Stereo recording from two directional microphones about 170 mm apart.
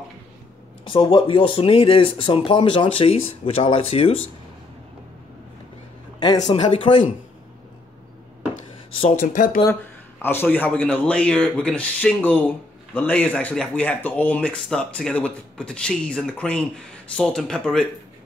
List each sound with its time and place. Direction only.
0.8 s speech: 30° left (ahead or behind)
6.4 s speech: 30° left (ahead or behind)
9.2 s speech: 50° left (ahead or behind)
10.2 s speech: 10° left (ahead or behind)